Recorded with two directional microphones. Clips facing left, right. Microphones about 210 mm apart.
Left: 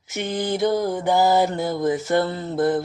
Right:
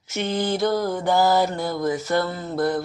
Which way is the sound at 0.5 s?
20° left (ahead or behind).